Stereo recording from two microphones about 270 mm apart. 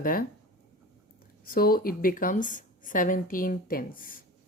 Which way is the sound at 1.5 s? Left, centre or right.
Left.